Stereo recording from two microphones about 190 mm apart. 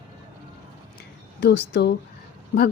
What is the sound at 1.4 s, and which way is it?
Speech, 65° left (ahead or behind).